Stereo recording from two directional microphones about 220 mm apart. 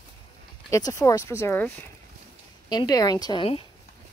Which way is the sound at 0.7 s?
15° left (ahead or behind).